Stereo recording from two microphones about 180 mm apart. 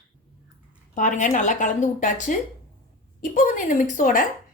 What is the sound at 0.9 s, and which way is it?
A woman's voice, 45° left (ahead or behind).